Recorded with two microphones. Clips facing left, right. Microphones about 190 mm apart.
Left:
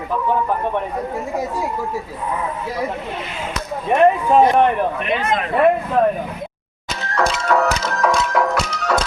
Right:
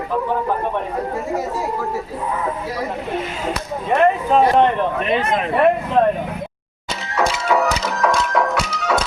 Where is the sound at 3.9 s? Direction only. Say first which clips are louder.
Left 2 dB; 15° left (ahead or behind).